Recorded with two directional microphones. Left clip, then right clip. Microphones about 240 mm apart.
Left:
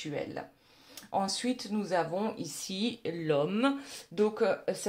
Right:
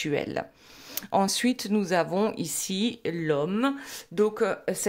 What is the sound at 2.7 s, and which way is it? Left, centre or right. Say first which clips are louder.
Speech: right 4 dB; right.